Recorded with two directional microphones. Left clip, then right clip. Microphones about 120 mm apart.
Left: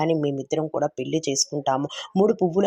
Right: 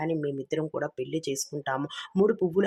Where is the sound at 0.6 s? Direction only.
10° left (ahead or behind).